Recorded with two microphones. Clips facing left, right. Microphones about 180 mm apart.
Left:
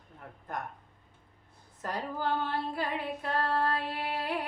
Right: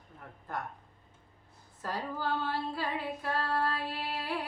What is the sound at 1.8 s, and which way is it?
Speech, 20° left (ahead or behind).